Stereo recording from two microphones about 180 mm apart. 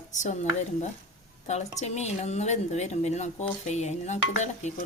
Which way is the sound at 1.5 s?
40° left (ahead or behind).